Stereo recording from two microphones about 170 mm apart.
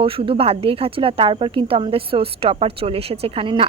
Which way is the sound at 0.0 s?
35° right (ahead or behind).